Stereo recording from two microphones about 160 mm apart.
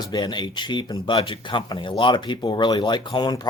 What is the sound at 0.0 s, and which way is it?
Speech, 25° left (ahead or behind).